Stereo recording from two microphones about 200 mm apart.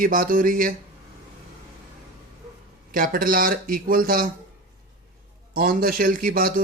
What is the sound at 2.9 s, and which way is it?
Speech, 45° right (ahead or behind).